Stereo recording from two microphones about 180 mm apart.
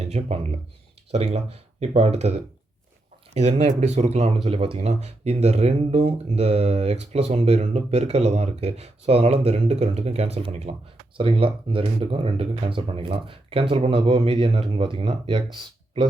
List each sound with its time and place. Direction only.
0.0 s speech: 35° right (ahead or behind)